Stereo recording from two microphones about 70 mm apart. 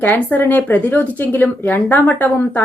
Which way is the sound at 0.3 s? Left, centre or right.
Left.